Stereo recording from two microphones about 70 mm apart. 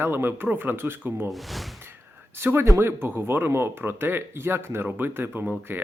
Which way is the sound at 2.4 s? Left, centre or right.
Right.